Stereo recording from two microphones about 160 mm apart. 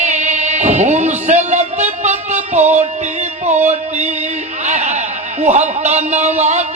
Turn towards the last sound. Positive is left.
turn(degrees=-45)  # may be behind; listen again after turning